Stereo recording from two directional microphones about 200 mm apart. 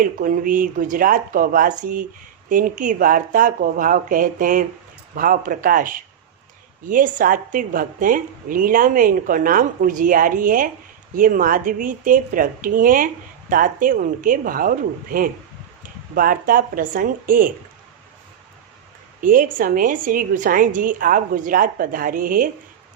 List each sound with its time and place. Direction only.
0.0 s a woman's voice: 45° right (ahead or behind)
19.2 s a woman's voice: 45° right (ahead or behind)